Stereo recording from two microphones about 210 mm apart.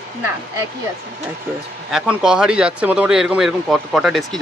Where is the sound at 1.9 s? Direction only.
5° right (ahead or behind).